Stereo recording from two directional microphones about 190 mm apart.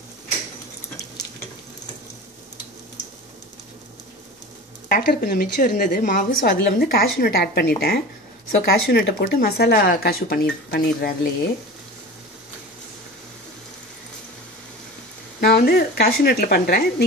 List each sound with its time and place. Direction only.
4.8 s a woman's voice: 50° left (ahead or behind)
15.4 s speech: 55° left (ahead or behind)